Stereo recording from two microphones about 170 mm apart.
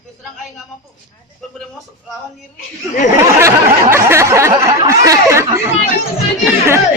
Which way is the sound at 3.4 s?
15° right (ahead or behind).